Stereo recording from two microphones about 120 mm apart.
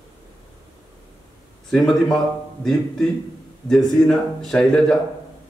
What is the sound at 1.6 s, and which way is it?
Speech, 5° left (ahead or behind).